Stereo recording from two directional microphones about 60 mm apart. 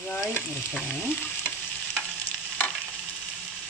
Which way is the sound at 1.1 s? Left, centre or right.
Left.